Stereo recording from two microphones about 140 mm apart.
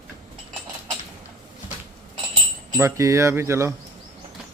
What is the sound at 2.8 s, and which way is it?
Speech, 20° right (ahead or behind).